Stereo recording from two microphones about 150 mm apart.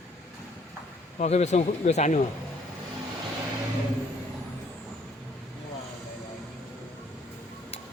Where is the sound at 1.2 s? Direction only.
50° left (ahead or behind).